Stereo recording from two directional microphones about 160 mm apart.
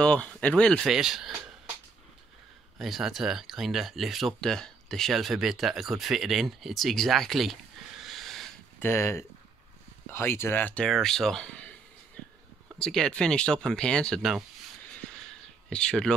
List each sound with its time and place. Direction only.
0.0 s speech: 5° left (ahead or behind)
2.8 s speech: centre (ahead or behind)
8.7 s speech: 15° left (ahead or behind)
12.7 s speech: 5° left (ahead or behind)
15.2 s a sound: 5° left (ahead or behind)